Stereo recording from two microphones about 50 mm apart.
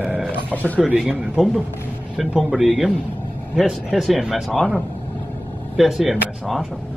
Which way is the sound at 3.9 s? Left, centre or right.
Centre.